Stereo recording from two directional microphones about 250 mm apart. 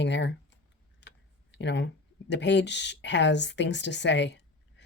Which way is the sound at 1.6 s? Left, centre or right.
Left.